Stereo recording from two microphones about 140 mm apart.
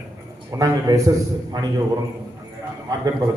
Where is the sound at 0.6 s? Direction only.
25° right (ahead or behind).